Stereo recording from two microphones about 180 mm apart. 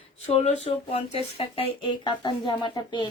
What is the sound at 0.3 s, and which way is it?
Speech, 35° left (ahead or behind).